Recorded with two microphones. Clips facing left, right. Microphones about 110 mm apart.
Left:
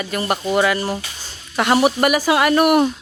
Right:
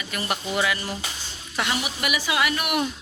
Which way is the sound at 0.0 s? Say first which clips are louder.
Left 8 dB; 40° left (ahead or behind).